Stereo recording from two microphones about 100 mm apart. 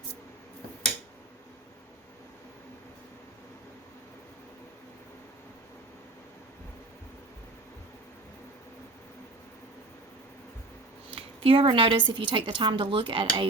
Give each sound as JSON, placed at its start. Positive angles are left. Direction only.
{"t": 11.1, "sound": "speech", "side_deg": -65}